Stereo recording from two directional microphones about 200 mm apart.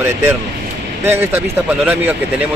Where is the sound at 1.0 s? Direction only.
10° right (ahead or behind).